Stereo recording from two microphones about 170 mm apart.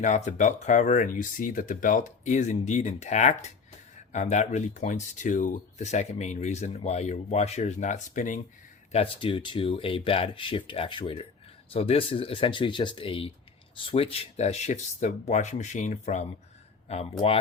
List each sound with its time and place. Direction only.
0.0 s speech: 45° left (ahead or behind)
8.9 s speech: 35° left (ahead or behind)